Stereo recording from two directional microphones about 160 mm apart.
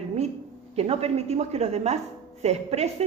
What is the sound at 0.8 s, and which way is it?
A woman's voice, 40° right (ahead or behind).